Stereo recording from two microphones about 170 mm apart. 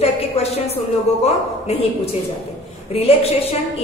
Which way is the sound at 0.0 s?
40° left (ahead or behind).